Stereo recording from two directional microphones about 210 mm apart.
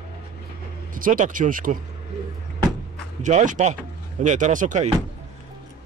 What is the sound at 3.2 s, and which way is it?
Speech, 35° right (ahead or behind).